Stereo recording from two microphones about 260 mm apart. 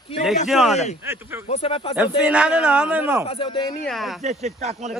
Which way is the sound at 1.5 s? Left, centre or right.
Left.